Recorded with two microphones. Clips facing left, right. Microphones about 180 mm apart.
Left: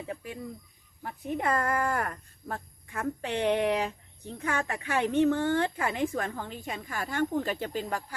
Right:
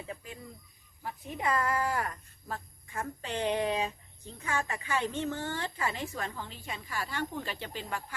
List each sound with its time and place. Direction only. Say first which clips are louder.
1.0 s speech: left 3 dB; 55° left (ahead or behind)